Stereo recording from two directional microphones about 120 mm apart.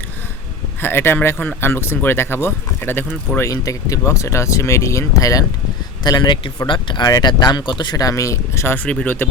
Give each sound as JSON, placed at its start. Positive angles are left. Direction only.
{"t": 0.8, "sound": "speech", "side_deg": 20}